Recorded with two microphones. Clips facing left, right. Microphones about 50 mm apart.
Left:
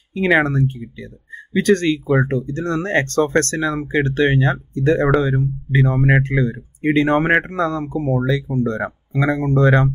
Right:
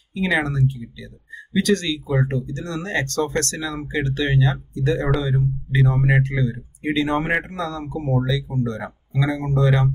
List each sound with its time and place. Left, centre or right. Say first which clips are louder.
0.4 s speech: left 4 dB; left